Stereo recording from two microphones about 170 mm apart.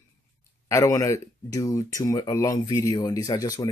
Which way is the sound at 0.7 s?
20° left (ahead or behind).